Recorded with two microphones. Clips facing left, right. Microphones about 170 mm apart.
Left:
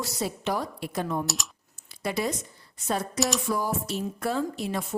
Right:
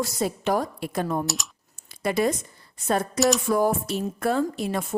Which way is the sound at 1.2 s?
Centre (ahead or behind).